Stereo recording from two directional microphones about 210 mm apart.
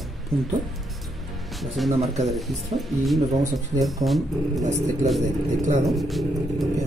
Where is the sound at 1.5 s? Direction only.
Centre (ahead or behind).